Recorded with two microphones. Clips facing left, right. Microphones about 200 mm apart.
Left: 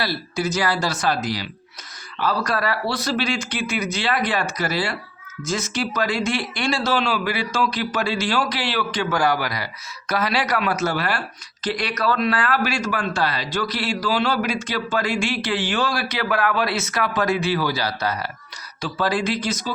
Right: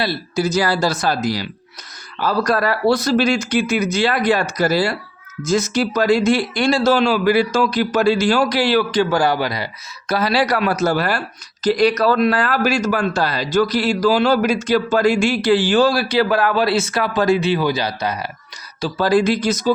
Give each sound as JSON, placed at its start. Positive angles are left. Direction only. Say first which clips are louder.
{"t": 0.0, "sound": "speech", "louder": "right 4 dB", "side_deg": -25}
{"t": 0.4, "sound": "speech", "louder": "right 5 dB", "side_deg": -35}
{"t": 18.8, "sound": "speech", "louder": "right 7 dB", "side_deg": -40}